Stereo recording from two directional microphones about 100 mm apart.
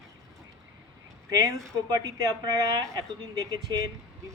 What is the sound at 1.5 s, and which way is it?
Speech, 35° right (ahead or behind).